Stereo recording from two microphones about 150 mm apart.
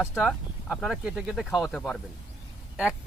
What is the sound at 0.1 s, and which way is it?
Speech, centre (ahead or behind).